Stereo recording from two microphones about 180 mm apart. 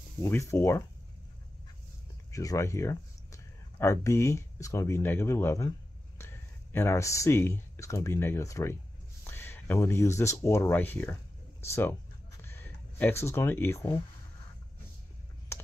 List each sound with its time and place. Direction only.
0.2 s speech: 15° left (ahead or behind)
2.3 s speech: 15° left (ahead or behind)
11.6 s a sound: 15° left (ahead or behind)